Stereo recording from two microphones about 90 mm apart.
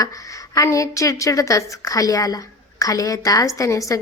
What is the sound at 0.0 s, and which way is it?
A woman's voice, 40° left (ahead or behind).